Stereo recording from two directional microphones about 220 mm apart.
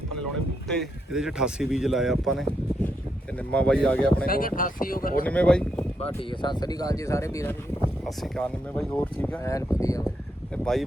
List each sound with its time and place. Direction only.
0.7 s speech: centre (ahead or behind)
4.3 s speech: 40° left (ahead or behind)
5.2 s speech: 5° left (ahead or behind)
6.0 s speech: 20° left (ahead or behind)
8.0 s speech: 5° left (ahead or behind)
10.5 s speech: 5° left (ahead or behind)